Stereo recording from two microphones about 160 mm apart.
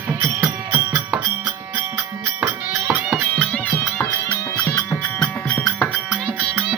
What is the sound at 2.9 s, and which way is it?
Music, centre (ahead or behind).